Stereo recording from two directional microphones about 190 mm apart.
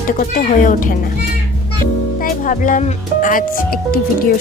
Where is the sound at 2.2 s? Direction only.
45° left (ahead or behind).